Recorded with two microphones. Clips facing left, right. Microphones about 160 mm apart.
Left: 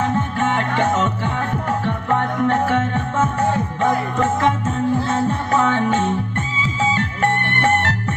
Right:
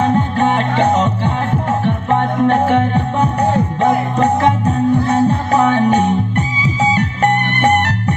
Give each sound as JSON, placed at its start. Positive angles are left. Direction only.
{"t": 0.0, "sound": "music", "side_deg": -20}